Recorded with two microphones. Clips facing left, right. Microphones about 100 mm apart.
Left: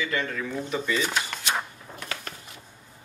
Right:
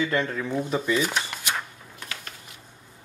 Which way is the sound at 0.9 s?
10° right (ahead or behind).